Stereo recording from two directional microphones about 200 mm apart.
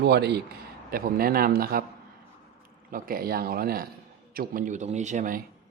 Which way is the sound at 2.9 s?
45° right (ahead or behind).